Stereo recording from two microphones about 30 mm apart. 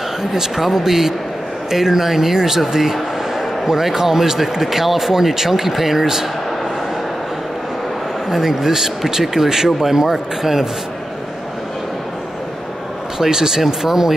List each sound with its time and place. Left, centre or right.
0.2 s a man's voice: centre
8.3 s speech: centre
13.2 s speech: centre